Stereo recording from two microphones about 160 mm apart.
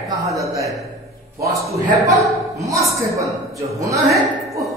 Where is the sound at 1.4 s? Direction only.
20° right (ahead or behind).